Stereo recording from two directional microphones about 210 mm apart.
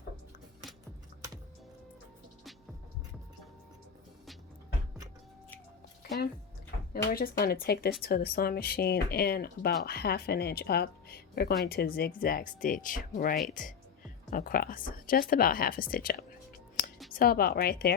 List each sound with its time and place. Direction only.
6.9 s speech: 45° left (ahead or behind)
17.2 s speech: 45° left (ahead or behind)